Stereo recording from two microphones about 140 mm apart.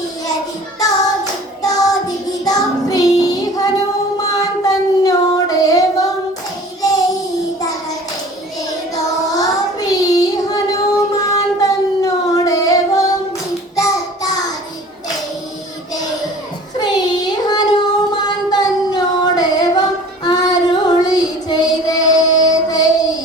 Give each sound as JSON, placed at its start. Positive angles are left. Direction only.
{"t": 1.6, "sound": "child singing", "side_deg": 25}
{"t": 4.2, "sound": "singing", "side_deg": 25}
{"t": 9.3, "sound": "child singing", "side_deg": 25}
{"t": 16.7, "sound": "child singing", "side_deg": 30}
{"t": 22.4, "sound": "music", "side_deg": 25}